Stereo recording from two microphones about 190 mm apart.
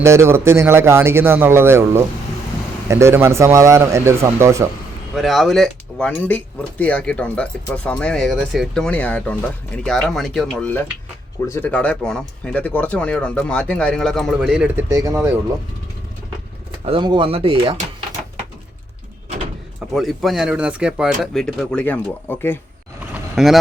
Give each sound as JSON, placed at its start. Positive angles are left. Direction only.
{"t": 0.0, "sound": "speech", "side_deg": -15}
{"t": 5.1, "sound": "speech", "side_deg": 0}
{"t": 16.8, "sound": "speech", "side_deg": -25}
{"t": 19.9, "sound": "speech", "side_deg": 0}
{"t": 23.1, "sound": "vehicle", "side_deg": 0}